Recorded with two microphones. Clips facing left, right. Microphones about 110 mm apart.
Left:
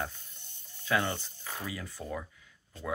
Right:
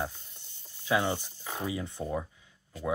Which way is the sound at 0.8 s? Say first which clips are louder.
Right 2 dB; 15° right (ahead or behind).